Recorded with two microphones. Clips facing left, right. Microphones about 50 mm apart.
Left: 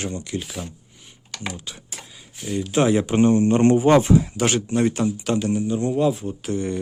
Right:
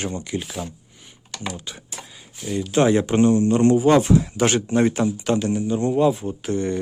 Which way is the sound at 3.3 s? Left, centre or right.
Left.